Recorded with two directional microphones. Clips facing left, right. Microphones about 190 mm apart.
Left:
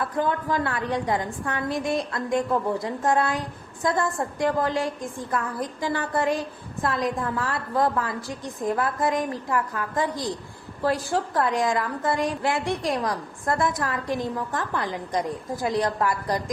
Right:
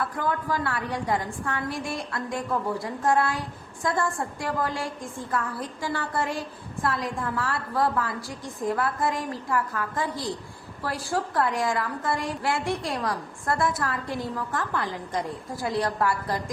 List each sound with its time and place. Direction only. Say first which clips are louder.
0.0 s a woman's voice: left 3 dB; 25° left (ahead or behind)